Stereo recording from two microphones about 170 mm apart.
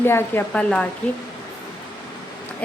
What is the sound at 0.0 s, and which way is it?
Speech, 15° left (ahead or behind).